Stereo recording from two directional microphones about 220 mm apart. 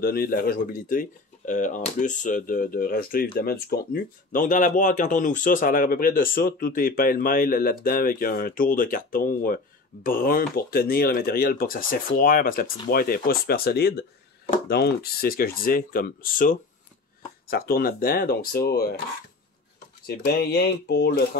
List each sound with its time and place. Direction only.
0.0 s speech: 45° left (ahead or behind)
20.1 s speech: 45° left (ahead or behind)